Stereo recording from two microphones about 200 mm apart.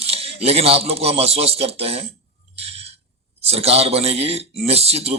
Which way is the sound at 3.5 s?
30° right (ahead or behind).